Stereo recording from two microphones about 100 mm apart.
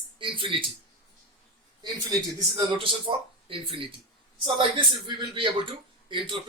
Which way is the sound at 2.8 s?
60° right (ahead or behind).